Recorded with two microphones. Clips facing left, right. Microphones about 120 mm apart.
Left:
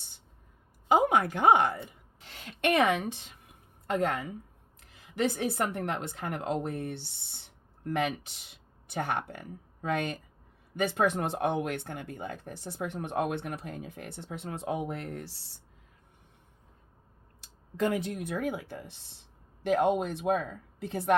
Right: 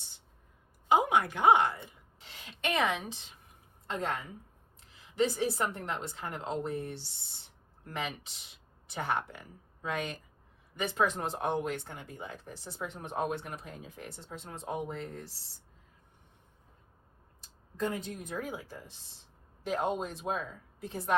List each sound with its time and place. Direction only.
0.9 s a woman's voice: 50° left (ahead or behind); by 15.3 s 65° left (ahead or behind)
17.4 s speech: 75° left (ahead or behind); by 21.2 s 60° left (ahead or behind)